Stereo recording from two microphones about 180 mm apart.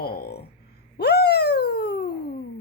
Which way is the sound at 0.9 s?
60° left (ahead or behind).